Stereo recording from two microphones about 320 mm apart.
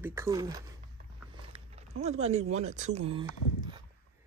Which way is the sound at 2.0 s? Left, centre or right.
Centre.